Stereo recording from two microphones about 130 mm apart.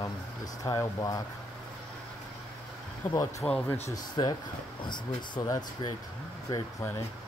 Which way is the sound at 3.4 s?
20° left (ahead or behind).